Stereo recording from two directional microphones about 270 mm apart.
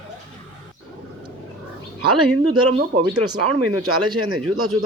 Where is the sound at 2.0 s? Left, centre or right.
Right.